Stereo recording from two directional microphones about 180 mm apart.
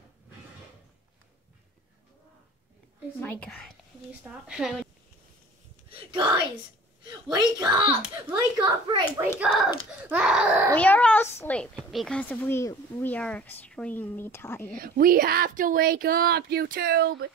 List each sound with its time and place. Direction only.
3.2 s speech: 10° left (ahead or behind)
5.9 s a child's voice: 30° right (ahead or behind)
10.0 s a sound: 5° right (ahead or behind)
10.8 s a woman's voice: 5° left (ahead or behind)
14.7 s speech: 50° right (ahead or behind)